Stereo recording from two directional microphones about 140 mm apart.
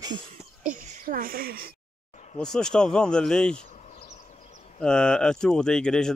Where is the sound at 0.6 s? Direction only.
65° right (ahead or behind); by 1.7 s 90° right.